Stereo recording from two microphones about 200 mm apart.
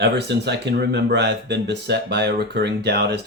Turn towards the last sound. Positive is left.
turn(degrees=-55)  # may be behind; listen again after turning